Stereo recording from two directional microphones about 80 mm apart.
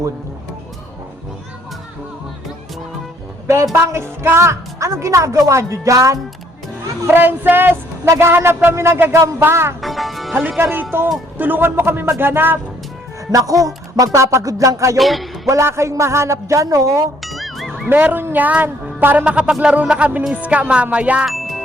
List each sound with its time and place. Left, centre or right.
3.4 s a woman's voice: right
7.1 s a woman's voice: right
8.0 s a woman's voice: right
9.8 s music: centre
10.6 s a woman's voice: right
13.3 s music: right
14.9 s a man's voice: centre
15.4 s a woman's voice: right
17.2 s music: centre
17.8 s a woman's voice: right
19.6 s music: centre
21.2 s music: centre